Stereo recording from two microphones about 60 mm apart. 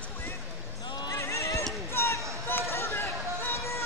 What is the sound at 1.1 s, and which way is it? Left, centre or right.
Basketball bounce, left.